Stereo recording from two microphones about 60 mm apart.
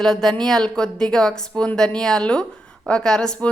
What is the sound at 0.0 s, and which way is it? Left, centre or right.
A woman's voice, centre.